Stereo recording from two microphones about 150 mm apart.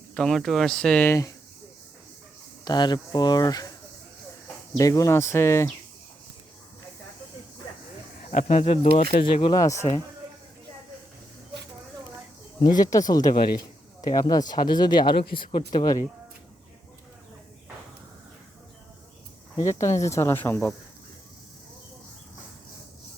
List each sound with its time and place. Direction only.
0.1 s speech: 5° left (ahead or behind)
2.6 s speech: 30° left (ahead or behind)
4.8 s speech: 20° left (ahead or behind)
8.2 s speech: 55° left (ahead or behind)
9.2 s speech: 35° left (ahead or behind)
9.6 s speech: 20° left (ahead or behind)
12.7 s speech: 25° left (ahead or behind)
19.5 s speech: 20° left (ahead or behind)